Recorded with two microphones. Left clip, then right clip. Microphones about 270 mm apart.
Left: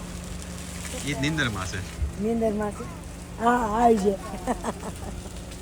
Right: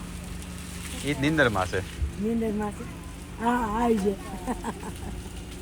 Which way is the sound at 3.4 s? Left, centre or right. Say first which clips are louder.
Left 4 dB; centre.